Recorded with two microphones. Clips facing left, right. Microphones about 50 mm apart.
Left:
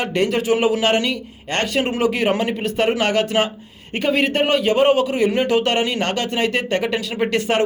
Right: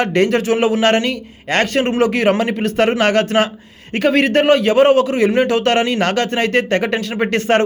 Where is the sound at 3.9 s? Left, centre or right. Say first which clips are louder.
Right 5 dB; right.